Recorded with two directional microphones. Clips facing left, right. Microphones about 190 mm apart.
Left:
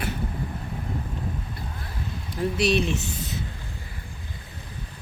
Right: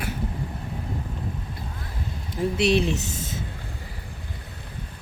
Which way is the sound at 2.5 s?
25° right (ahead or behind).